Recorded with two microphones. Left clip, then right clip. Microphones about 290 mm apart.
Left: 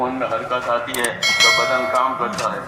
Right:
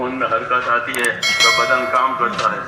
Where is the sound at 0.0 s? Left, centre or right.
Centre.